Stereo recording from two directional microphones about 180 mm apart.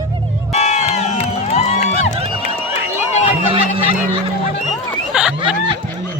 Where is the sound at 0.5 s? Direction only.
40° left (ahead or behind).